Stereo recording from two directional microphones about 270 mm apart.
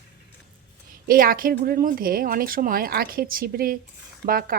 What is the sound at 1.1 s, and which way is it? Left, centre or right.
Speech, right.